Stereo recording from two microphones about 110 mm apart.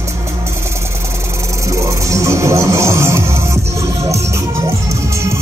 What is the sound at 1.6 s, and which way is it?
Music, 25° right (ahead or behind).